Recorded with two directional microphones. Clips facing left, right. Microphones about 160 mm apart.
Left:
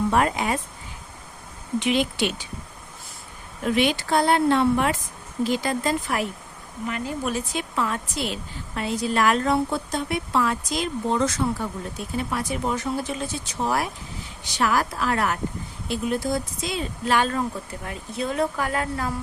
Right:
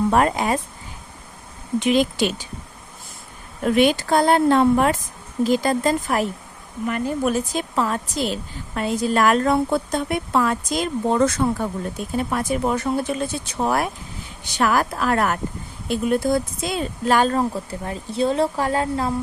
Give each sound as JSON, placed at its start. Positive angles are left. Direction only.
{"t": 0.1, "sound": "speech", "side_deg": -40}
{"t": 1.8, "sound": "speech", "side_deg": -40}
{"t": 3.8, "sound": "speech", "side_deg": -45}